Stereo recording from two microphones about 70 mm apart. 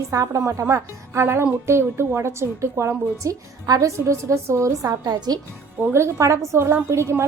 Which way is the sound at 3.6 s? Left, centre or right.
Right.